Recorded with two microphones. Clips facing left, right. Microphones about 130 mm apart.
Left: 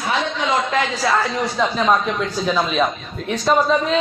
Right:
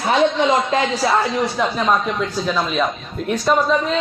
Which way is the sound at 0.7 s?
20° right (ahead or behind).